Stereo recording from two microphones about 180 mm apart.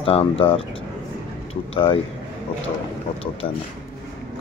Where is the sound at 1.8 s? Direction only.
30° left (ahead or behind).